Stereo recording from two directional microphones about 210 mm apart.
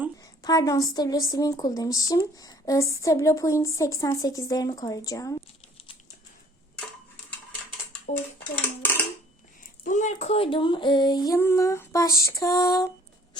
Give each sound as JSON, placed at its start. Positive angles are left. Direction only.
{"t": 0.2, "sound": "speech", "side_deg": 15}
{"t": 8.8, "sound": "a sound", "side_deg": 10}
{"t": 9.6, "sound": "speech", "side_deg": 35}